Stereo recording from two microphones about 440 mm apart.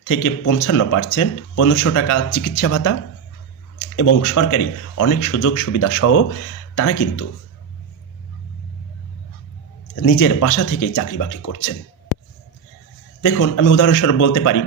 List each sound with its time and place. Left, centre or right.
0.1 s speech: left
3.9 s speech: left
9.9 s speech: left
13.2 s speech: left